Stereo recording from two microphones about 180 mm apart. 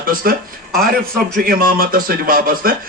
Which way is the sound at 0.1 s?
55° right (ahead or behind).